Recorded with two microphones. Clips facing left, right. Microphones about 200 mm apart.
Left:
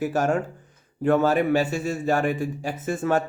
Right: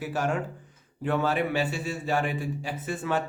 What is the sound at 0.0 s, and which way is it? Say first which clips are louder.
A man's voice: left 6 dB; 45° left (ahead or behind).